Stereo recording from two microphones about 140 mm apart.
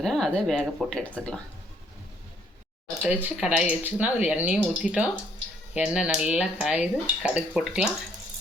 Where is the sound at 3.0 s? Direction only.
10° right (ahead or behind).